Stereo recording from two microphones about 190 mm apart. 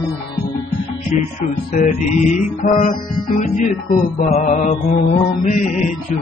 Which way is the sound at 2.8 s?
35° left (ahead or behind).